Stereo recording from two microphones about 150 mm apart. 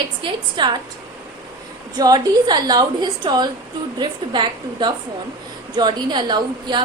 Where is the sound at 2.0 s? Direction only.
25° right (ahead or behind).